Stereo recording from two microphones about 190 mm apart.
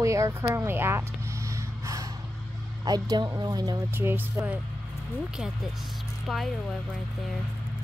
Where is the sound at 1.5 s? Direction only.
15° right (ahead or behind).